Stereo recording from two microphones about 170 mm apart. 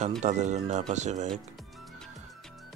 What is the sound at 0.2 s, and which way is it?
Speech, 45° right (ahead or behind).